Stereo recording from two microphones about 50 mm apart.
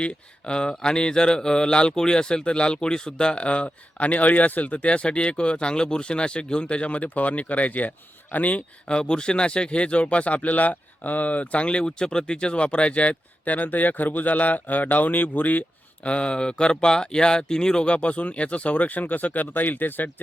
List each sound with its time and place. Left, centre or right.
0.0 s speech: centre
16.0 s speech: left